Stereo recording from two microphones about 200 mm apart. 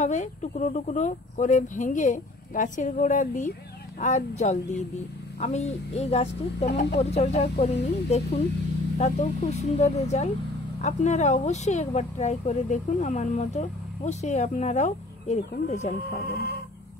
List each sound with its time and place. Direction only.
0.0 s speech: 35° left (ahead or behind)
16.2 s chicken: 50° left (ahead or behind)